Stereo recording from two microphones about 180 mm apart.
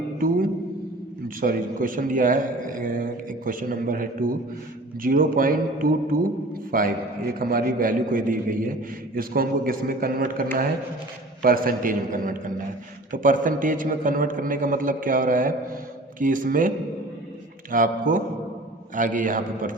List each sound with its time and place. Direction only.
0.2 s music: 55° right (ahead or behind)
1.4 s a man's voice: 50° right (ahead or behind)